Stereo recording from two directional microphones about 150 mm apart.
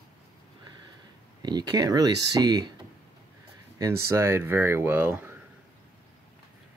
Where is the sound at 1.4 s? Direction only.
30° right (ahead or behind).